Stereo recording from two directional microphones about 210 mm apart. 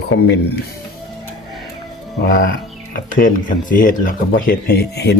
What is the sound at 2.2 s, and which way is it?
Speech, 40° left (ahead or behind).